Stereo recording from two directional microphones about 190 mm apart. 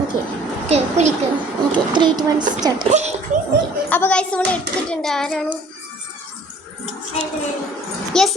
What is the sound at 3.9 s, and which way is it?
A child's voice, 10° left (ahead or behind).